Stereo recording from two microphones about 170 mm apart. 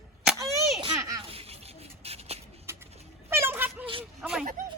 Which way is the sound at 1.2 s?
35° right (ahead or behind).